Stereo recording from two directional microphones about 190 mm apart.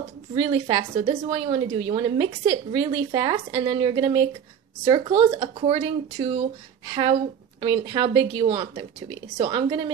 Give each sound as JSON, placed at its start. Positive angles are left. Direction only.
{"t": 0.3, "sound": "a woman's voice", "side_deg": -25}